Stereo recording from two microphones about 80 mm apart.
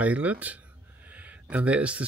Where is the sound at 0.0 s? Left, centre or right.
Centre.